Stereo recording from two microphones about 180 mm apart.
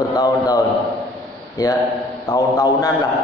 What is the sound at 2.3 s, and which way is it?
Speech, 20° left (ahead or behind).